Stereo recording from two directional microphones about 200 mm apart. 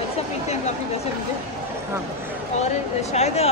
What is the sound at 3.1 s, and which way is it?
Speech, 35° left (ahead or behind).